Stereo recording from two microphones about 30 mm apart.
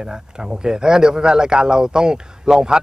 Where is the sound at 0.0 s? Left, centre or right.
Right.